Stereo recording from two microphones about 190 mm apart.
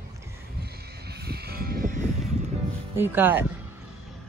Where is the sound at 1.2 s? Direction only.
55° right (ahead or behind).